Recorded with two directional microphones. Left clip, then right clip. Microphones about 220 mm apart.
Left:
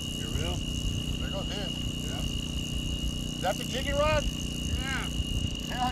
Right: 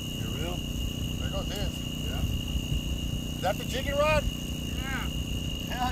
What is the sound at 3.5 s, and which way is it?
Speech, 60° right (ahead or behind).